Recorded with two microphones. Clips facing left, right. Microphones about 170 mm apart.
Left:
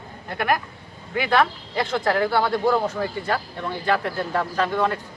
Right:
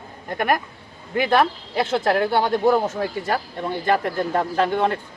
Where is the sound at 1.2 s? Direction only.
15° right (ahead or behind).